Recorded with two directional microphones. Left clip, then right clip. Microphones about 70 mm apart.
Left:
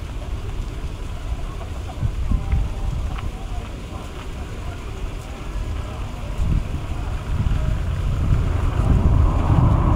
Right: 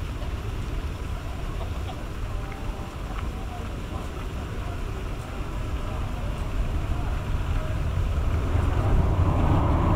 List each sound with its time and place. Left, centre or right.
8.5 s vehicle: centre